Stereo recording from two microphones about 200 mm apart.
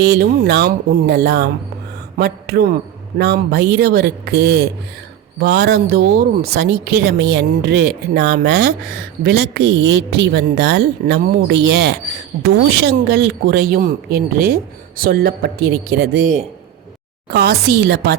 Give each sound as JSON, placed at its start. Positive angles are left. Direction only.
{"t": 0.0, "sound": "a woman's voice", "side_deg": -55}
{"t": 17.3, "sound": "a man's voice", "side_deg": -50}